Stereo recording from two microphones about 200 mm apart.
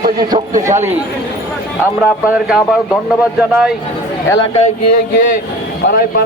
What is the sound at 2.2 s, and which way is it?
Speech, 5° right (ahead or behind).